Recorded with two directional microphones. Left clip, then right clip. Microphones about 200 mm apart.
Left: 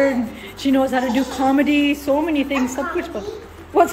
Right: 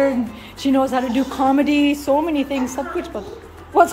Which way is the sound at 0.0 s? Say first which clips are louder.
Even; 10° right (ahead or behind).